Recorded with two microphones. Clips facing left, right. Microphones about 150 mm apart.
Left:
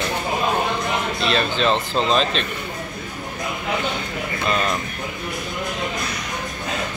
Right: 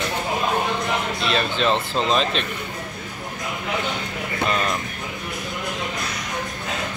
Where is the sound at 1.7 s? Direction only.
20° left (ahead or behind).